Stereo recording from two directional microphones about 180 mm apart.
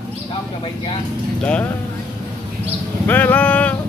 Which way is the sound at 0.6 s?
30° left (ahead or behind).